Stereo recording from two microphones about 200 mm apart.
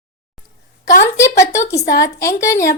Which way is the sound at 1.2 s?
15° left (ahead or behind).